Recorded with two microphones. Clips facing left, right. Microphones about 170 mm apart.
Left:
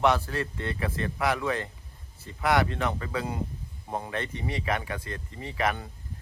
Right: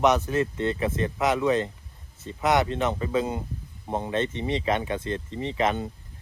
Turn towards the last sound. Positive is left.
turn(degrees=-20)  # may be behind; listen again after turning